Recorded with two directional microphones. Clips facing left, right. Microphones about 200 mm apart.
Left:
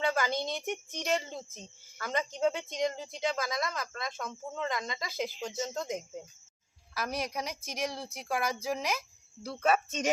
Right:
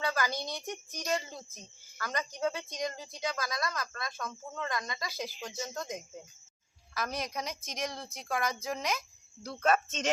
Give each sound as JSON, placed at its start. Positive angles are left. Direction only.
{"t": 0.0, "sound": "speech", "side_deg": 25}
{"t": 6.9, "sound": "a woman's voice", "side_deg": 5}